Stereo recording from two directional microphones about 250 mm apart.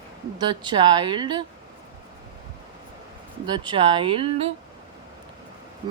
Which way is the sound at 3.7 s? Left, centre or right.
Right.